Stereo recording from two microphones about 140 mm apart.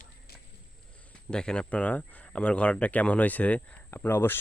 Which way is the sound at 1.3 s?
5° left (ahead or behind).